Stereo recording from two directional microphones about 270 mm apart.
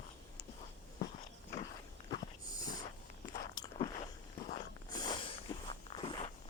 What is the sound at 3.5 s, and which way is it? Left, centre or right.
Biting, centre.